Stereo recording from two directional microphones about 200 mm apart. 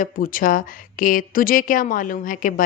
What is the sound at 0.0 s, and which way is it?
A woman's voice, 45° left (ahead or behind).